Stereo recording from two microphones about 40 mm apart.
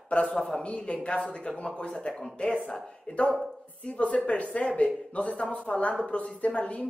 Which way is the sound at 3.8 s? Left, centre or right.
Left.